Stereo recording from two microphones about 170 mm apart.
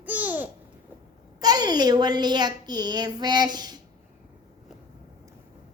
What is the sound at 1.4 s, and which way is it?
A child's voice, 25° right (ahead or behind).